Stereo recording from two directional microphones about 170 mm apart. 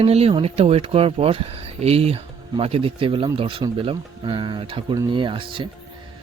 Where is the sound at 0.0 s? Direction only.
35° right (ahead or behind).